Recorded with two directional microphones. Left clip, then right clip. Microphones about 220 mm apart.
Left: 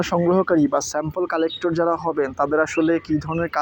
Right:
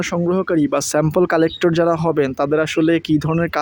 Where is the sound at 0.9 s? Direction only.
55° right (ahead or behind).